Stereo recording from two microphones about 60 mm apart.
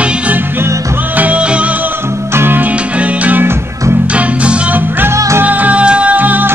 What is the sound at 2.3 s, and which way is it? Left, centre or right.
Music, right.